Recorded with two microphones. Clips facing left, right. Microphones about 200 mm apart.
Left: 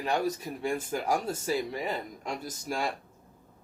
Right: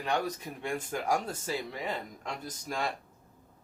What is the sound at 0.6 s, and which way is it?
Speech, 5° left (ahead or behind).